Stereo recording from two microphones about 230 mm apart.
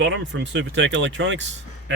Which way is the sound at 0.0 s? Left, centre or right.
Right.